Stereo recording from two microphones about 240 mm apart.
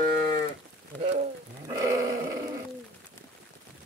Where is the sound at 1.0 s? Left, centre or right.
Right.